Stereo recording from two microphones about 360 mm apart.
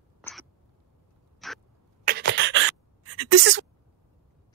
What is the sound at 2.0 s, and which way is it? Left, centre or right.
Gasp, right.